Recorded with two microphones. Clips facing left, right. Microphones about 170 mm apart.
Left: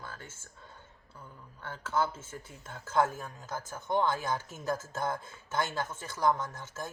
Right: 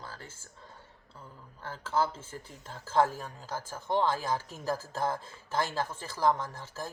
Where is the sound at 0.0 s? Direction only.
30° right (ahead or behind).